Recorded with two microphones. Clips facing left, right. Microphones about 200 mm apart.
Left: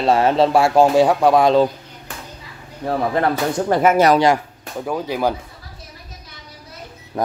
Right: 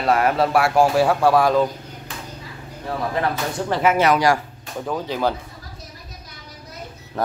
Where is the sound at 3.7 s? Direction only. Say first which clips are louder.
Left 3 dB; 45° left (ahead or behind).